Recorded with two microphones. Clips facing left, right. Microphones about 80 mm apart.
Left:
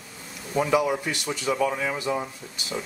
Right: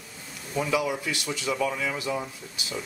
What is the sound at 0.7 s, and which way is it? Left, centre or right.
Speech, left.